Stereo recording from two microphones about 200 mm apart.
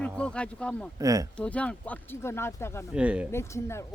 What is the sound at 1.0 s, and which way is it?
Speech, 15° right (ahead or behind).